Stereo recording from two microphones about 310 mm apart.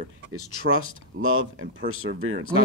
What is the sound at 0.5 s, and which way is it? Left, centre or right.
Speech, right.